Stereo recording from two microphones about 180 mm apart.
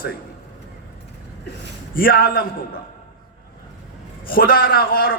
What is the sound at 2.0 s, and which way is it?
Speech, 55° left (ahead or behind).